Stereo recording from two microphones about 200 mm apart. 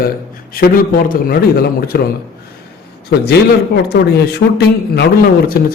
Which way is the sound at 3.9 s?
55° left (ahead or behind).